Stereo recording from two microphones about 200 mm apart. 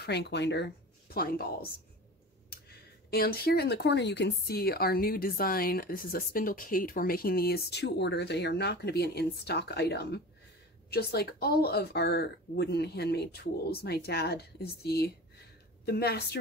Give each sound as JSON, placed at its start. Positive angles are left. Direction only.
{"t": 0.0, "sound": "speech", "side_deg": 60}
{"t": 2.5, "sound": "speech", "side_deg": 50}